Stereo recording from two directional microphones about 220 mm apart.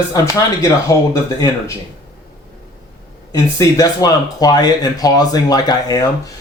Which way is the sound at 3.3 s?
15° left (ahead or behind).